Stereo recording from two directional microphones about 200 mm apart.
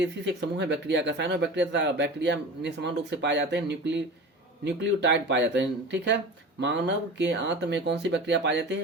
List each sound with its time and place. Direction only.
0.0 s speech: 60° right (ahead or behind)